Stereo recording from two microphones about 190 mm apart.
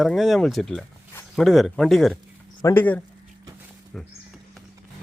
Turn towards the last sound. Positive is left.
turn(degrees=0)  # may be behind; listen again after turning